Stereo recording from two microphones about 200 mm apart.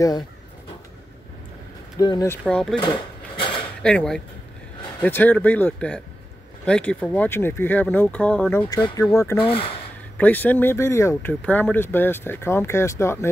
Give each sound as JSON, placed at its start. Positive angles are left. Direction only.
{"t": 2.0, "sound": "speech", "side_deg": 20}
{"t": 2.8, "sound": "a sound", "side_deg": 25}
{"t": 3.8, "sound": "speech", "side_deg": 5}
{"t": 8.6, "sound": "speech", "side_deg": 15}
{"t": 9.4, "sound": "speech", "side_deg": 25}
{"t": 10.1, "sound": "speech", "side_deg": 10}